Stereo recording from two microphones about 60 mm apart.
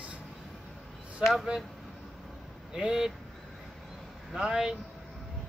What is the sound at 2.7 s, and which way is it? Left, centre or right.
Speech, centre.